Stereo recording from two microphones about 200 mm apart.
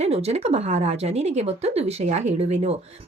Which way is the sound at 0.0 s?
30° right (ahead or behind).